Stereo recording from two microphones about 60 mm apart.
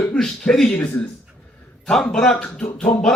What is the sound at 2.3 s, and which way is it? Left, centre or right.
Music, left.